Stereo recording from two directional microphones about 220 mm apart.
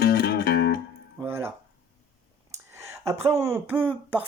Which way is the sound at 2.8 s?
10° right (ahead or behind).